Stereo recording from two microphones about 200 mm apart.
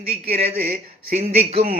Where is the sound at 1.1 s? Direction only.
30° right (ahead or behind).